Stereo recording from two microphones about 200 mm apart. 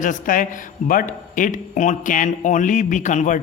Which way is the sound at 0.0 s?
40° left (ahead or behind).